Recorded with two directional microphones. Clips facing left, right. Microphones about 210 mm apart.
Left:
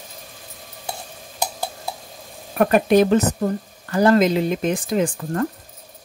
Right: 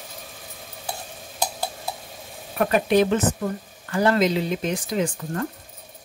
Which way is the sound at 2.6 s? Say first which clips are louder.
Left 4 dB; 45° left (ahead or behind).